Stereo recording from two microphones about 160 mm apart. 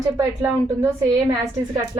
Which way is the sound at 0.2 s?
15° right (ahead or behind).